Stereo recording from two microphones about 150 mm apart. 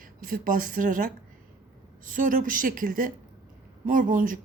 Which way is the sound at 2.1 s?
65° right (ahead or behind).